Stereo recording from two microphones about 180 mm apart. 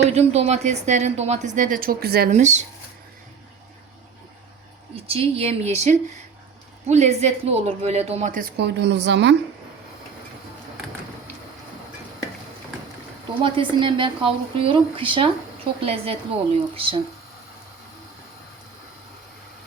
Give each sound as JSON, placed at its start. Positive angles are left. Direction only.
{"t": 0.1, "sound": "speech", "side_deg": -35}
{"t": 2.3, "sound": "speech", "side_deg": -40}
{"t": 4.9, "sound": "speech", "side_deg": -35}
{"t": 13.4, "sound": "a woman's voice", "side_deg": -30}